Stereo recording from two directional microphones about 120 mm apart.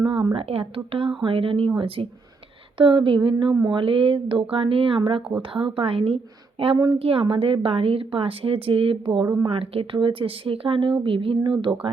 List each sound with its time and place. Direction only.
0.0 s a woman's voice: 40° right (ahead or behind)
3.3 s speech: 30° right (ahead or behind)
3.8 s a woman's voice: 50° right (ahead or behind)
9.2 s speech: 30° right (ahead or behind)
9.5 s a woman's voice: 50° right (ahead or behind)